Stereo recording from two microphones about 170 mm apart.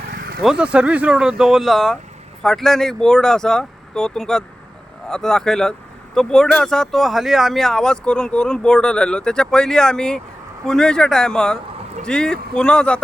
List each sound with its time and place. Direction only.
0.1 s vehicle: 65° right (ahead or behind)
0.4 s speech: 5° right (ahead or behind)